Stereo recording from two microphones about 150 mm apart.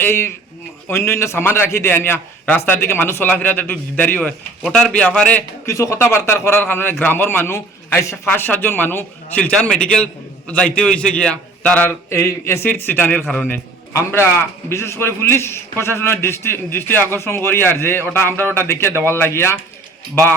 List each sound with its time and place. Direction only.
0.0 s a man's voice: 15° left (ahead or behind)
5.6 s a man's voice: 20° left (ahead or behind)